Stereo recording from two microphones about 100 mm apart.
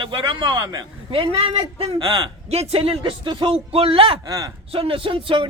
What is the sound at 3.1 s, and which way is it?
A man's voice, 55° right (ahead or behind).